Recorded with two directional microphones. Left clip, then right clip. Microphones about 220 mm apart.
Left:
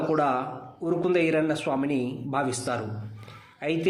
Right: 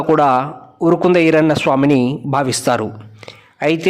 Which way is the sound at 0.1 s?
45° right (ahead or behind).